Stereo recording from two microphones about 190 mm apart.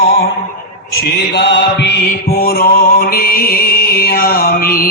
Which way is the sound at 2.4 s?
50° left (ahead or behind).